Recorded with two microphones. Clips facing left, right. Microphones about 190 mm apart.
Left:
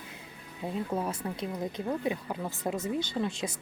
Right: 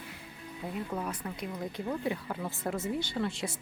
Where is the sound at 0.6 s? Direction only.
25° left (ahead or behind).